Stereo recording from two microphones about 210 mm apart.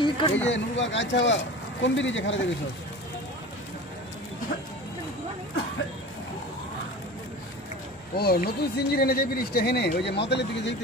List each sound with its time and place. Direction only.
0.0 s a sound: 25° left (ahead or behind)
0.5 s speech: 60° left (ahead or behind)
8.2 s speech: 50° left (ahead or behind)